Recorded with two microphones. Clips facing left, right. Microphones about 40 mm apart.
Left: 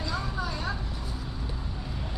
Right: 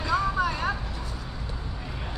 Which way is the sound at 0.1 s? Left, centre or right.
Right.